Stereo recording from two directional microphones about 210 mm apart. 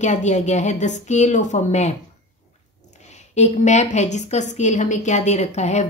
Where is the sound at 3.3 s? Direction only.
35° left (ahead or behind).